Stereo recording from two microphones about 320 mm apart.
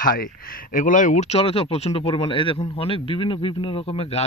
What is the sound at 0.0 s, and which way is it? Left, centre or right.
Speech, left.